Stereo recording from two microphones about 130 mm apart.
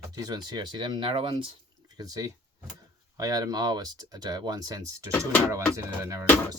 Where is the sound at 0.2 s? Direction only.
30° right (ahead or behind).